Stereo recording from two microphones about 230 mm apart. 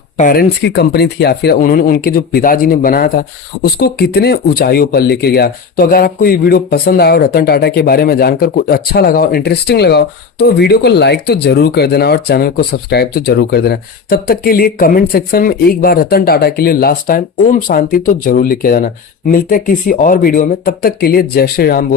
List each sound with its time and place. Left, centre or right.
0.2 s speech: left